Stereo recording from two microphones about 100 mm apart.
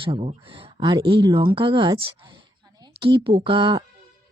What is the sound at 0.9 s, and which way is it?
A woman's voice, 50° right (ahead or behind).